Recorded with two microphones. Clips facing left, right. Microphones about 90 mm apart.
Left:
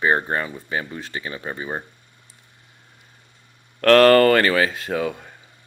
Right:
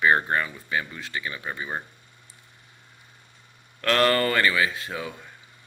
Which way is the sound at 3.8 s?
50° left (ahead or behind).